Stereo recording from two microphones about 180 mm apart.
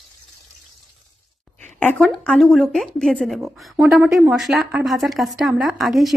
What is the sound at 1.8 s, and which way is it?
A woman's voice, 10° left (ahead or behind).